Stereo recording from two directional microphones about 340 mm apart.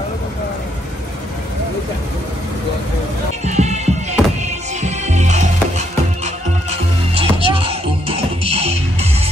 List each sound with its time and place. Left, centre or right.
3.4 s music: centre